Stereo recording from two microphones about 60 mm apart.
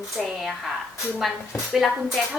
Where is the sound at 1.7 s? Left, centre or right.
Centre.